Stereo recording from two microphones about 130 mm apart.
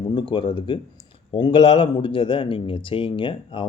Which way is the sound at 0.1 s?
40° left (ahead or behind).